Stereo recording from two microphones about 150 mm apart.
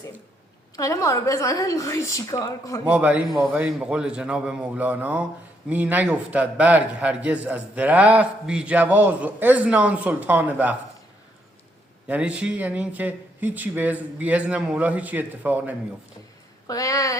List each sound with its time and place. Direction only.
0.8 s a woman's voice: 20° left (ahead or behind)
2.8 s speech: 10° right (ahead or behind)
12.0 s speech: 10° right (ahead or behind)
16.6 s a woman's voice: 20° left (ahead or behind)